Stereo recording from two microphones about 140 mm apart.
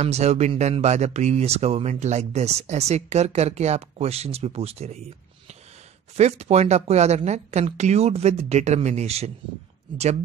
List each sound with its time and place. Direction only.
0.0 s speech: 50° right (ahead or behind)
6.1 s speech: 50° right (ahead or behind)